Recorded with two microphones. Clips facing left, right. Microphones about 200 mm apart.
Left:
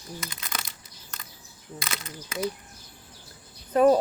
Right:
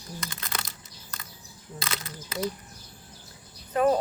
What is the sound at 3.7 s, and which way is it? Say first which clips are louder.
Speech: left 4 dB; 40° left (ahead or behind).